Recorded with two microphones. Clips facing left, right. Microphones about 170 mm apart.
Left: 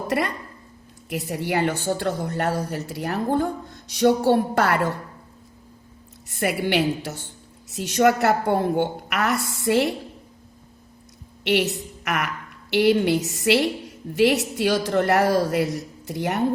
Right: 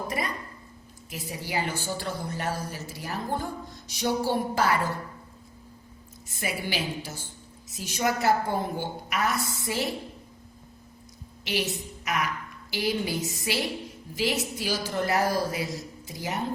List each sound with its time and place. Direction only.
1.1 s a woman's voice: 65° left (ahead or behind)
6.2 s a woman's voice: 65° left (ahead or behind)
11.4 s a woman's voice: 65° left (ahead or behind)